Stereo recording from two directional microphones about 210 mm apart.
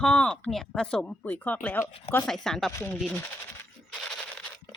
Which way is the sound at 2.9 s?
5° left (ahead or behind).